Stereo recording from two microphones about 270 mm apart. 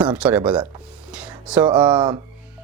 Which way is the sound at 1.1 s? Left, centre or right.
Centre.